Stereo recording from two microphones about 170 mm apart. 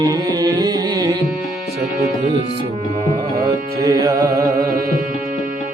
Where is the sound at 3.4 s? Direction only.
20° right (ahead or behind).